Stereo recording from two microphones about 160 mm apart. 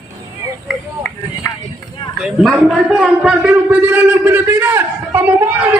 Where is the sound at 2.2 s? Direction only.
Centre (ahead or behind).